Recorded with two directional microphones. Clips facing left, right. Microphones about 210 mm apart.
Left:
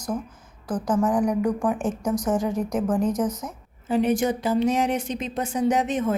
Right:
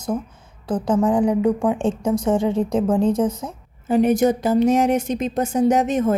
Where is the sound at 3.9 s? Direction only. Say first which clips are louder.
Right 5 dB; 45° right (ahead or behind).